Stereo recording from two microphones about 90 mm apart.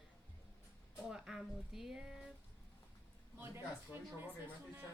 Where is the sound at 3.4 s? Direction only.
25° right (ahead or behind).